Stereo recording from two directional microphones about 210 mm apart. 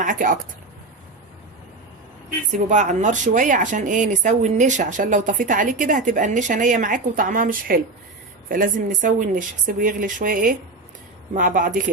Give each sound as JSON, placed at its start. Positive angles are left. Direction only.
{"t": 0.0, "sound": "a woman's voice", "side_deg": -40}
{"t": 2.5, "sound": "speech", "side_deg": -35}